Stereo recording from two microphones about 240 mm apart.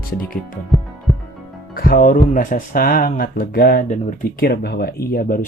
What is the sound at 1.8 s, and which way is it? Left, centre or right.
Speech, left.